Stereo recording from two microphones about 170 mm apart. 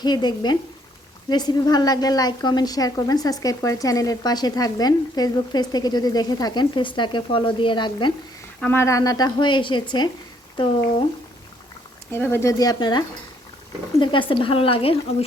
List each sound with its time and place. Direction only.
0.0 s a woman's voice: 25° left (ahead or behind)
8.6 s a woman's voice: 15° left (ahead or behind)
12.1 s a woman's voice: 15° left (ahead or behind); by 14.9 s 35° left (ahead or behind)